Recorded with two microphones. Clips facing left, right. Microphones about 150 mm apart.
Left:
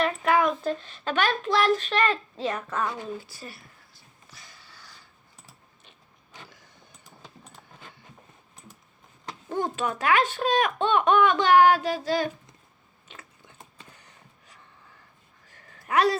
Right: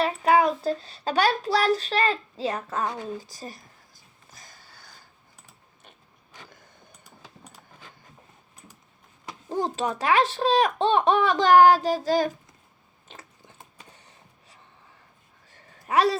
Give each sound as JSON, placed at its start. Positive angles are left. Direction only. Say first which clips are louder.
{"t": 0.0, "sound": "a child's voice", "louder": "right 2 dB", "side_deg": -35}
{"t": 9.5, "sound": "speech", "louder": "right 1 dB", "side_deg": -35}
{"t": 15.9, "sound": "speech", "louder": "right 1 dB", "side_deg": -35}